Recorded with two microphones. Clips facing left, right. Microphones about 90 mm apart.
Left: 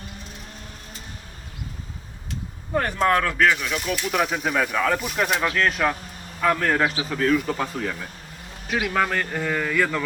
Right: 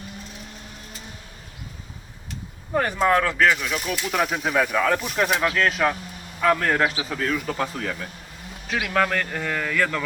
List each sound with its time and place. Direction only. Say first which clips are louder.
2.7 s speech: right 1 dB; 5° right (ahead or behind)